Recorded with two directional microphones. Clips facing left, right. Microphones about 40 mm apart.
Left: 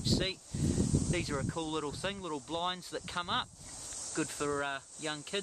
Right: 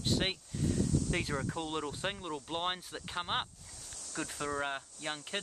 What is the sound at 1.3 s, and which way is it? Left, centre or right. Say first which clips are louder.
Speech: even; centre.